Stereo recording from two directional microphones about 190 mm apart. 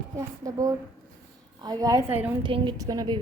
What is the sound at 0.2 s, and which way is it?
A woman's voice, 15° right (ahead or behind).